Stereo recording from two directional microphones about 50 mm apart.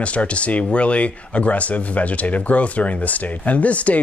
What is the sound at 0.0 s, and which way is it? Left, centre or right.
Speech, left.